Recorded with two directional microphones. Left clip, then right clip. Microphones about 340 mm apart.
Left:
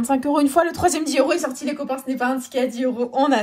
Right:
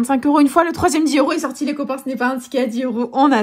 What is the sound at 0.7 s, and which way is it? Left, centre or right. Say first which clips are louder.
Speech: right 4 dB; centre.